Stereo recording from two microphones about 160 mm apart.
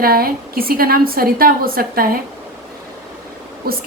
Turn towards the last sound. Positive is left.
turn(degrees=-75)  # may be behind; listen again after turning